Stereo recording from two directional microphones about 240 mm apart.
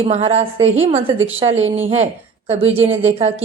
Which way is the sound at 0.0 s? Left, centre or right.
Right.